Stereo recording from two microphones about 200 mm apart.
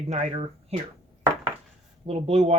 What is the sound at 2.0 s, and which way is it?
Speech, 30° right (ahead or behind).